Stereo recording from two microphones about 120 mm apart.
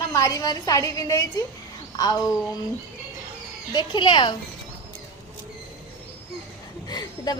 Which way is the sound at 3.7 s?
40° left (ahead or behind).